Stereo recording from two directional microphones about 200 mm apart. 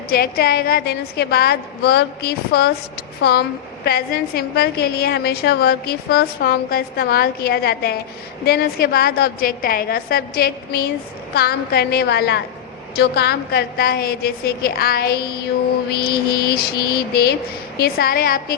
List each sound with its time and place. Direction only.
0.1 s a woman's voice: 50° left (ahead or behind)
3.8 s a woman's voice: 50° left (ahead or behind)